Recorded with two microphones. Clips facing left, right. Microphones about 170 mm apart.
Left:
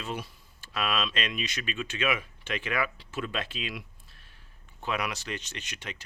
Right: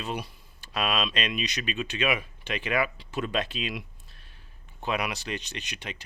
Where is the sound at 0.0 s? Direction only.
15° right (ahead or behind).